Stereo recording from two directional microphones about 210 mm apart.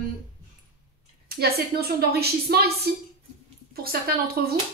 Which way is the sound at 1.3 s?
45° right (ahead or behind).